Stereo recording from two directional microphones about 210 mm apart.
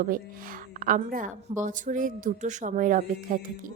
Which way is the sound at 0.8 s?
40° right (ahead or behind).